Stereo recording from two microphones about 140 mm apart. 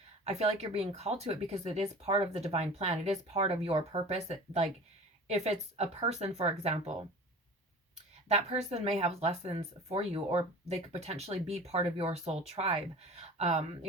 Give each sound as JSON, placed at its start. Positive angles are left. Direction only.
{"t": 0.3, "sound": "speech", "side_deg": -50}
{"t": 8.3, "sound": "speech", "side_deg": -50}